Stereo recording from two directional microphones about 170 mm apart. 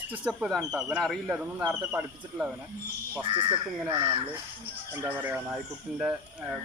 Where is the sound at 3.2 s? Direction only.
30° right (ahead or behind).